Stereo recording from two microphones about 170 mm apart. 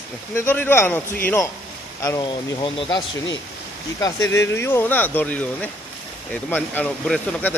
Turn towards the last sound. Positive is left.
turn(degrees=5)  # may be behind; listen again after turning